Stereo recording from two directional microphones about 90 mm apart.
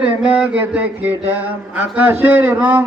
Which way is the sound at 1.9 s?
20° right (ahead or behind).